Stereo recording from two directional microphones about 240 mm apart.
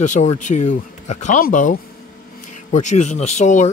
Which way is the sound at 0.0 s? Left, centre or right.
Left.